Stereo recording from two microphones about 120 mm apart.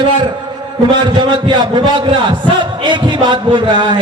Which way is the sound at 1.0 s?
40° right (ahead or behind).